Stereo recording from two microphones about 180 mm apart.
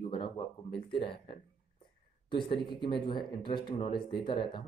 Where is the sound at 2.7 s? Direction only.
25° left (ahead or behind).